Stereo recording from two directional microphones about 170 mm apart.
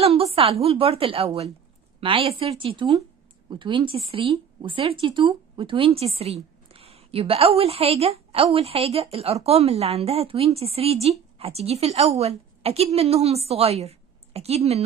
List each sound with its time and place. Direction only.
0.0 s a woman's voice: 35° right (ahead or behind)